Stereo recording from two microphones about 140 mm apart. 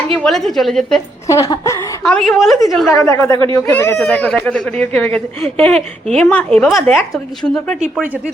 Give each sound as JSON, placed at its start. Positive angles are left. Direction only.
{"t": 0.1, "sound": "speech", "side_deg": 5}
{"t": 1.3, "sound": "a woman's voice", "side_deg": 20}
{"t": 2.0, "sound": "speech", "side_deg": 5}
{"t": 2.9, "sound": "a woman's voice", "side_deg": 20}